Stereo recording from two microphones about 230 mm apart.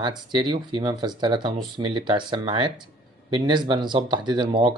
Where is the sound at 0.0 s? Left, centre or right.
Centre.